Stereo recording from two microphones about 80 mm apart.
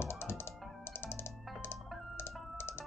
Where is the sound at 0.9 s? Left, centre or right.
Left.